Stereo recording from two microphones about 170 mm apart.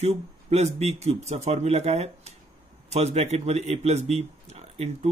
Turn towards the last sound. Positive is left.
turn(degrees=-40)  # may be behind; listen again after turning